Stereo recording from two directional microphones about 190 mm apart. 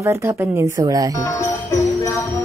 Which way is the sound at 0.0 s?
15° right (ahead or behind).